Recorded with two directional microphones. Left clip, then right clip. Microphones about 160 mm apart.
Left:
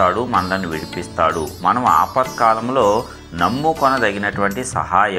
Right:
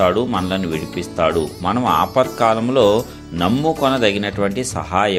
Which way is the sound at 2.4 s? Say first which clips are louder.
Left 2 dB; 85° right.